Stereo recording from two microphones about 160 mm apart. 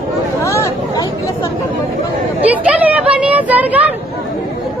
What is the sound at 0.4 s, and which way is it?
Chatter, 20° left (ahead or behind).